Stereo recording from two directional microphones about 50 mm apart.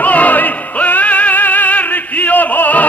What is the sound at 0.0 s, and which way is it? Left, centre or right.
Music, left.